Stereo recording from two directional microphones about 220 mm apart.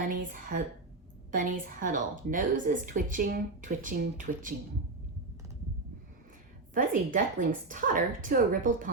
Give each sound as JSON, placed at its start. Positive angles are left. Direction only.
{"t": 0.0, "sound": "a woman's voice", "side_deg": -40}
{"t": 6.7, "sound": "a woman's voice", "side_deg": -35}